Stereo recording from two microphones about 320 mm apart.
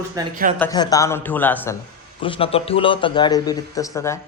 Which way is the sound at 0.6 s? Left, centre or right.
Centre.